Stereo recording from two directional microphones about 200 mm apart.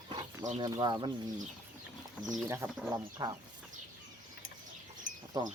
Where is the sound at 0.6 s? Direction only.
20° right (ahead or behind).